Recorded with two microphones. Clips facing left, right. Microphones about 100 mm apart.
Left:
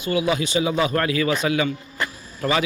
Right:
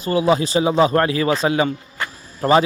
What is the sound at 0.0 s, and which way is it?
A man's voice, 35° right (ahead or behind).